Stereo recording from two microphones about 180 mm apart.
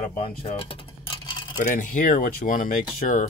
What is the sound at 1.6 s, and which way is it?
Speech, 50° left (ahead or behind).